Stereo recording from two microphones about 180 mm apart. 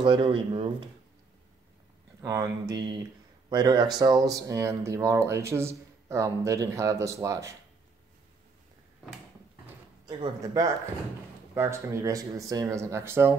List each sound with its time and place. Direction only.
0.0 s speech: 25° right (ahead or behind)
2.2 s speech: 15° right (ahead or behind)
10.0 s speech: 20° right (ahead or behind)